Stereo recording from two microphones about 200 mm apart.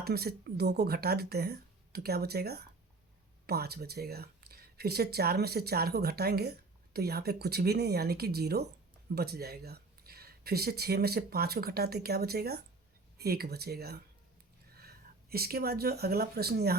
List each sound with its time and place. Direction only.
0.0 s speech: 50° right (ahead or behind)